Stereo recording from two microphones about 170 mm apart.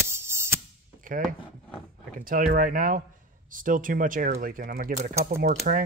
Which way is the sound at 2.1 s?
50° right (ahead or behind).